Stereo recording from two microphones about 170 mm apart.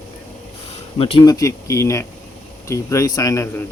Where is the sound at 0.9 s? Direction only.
35° left (ahead or behind).